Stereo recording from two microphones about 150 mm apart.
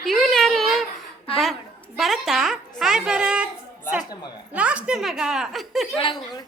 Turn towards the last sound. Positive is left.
turn(degrees=0)  # may be behind; listen again after turning